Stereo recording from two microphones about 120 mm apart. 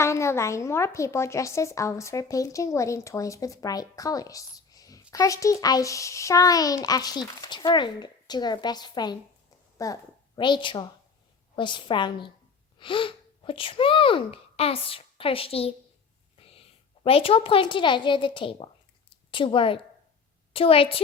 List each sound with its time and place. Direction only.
0.0 s a woman's voice: 25° left (ahead or behind); by 21.0 s 50° left (ahead or behind)